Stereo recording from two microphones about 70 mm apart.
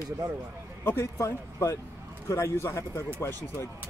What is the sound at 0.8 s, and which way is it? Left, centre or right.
Speech, left.